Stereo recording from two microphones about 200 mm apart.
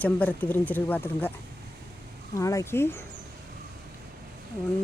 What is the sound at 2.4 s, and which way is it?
Speech, 15° left (ahead or behind).